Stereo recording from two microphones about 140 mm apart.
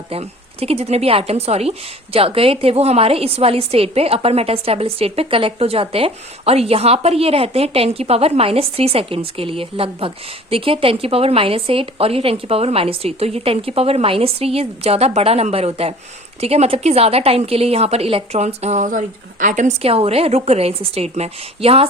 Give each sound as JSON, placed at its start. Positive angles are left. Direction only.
{"t": 0.1, "sound": "a woman's voice", "side_deg": -45}